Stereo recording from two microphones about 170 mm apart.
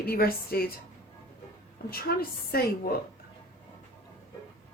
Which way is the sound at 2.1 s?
65° left (ahead or behind).